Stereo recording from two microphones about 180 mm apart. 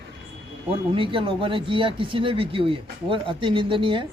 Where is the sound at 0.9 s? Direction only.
30° right (ahead or behind).